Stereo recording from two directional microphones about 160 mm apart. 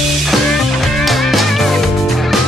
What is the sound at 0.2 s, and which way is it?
Music, centre (ahead or behind).